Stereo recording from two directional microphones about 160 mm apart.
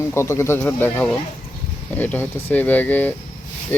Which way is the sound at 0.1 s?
15° left (ahead or behind).